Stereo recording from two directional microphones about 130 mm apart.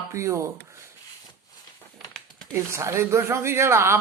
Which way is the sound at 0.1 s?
20° right (ahead or behind).